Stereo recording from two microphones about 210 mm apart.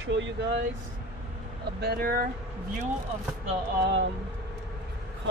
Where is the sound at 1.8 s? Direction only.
45° right (ahead or behind).